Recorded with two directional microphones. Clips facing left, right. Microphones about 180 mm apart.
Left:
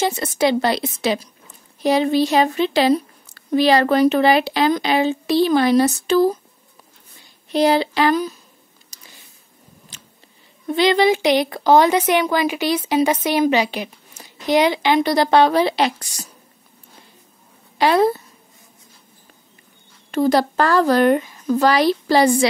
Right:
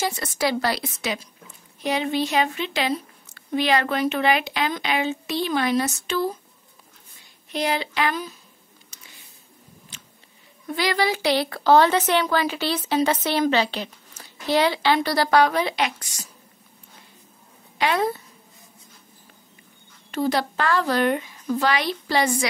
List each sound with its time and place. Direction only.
0.0 s a woman's voice: 25° left (ahead or behind)
7.5 s a woman's voice: 35° left (ahead or behind)
8.9 s a sound: 35° left (ahead or behind)
10.7 s a woman's voice: 20° left (ahead or behind)
17.7 s a woman's voice: 35° left (ahead or behind)
20.1 s a woman's voice: 45° left (ahead or behind)